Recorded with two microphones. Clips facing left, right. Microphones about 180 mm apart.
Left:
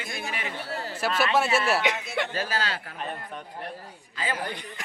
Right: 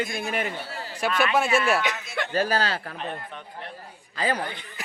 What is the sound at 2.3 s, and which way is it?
Speech, 40° right (ahead or behind).